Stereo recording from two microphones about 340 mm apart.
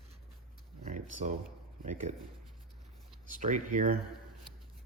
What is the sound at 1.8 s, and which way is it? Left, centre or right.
Speech, right.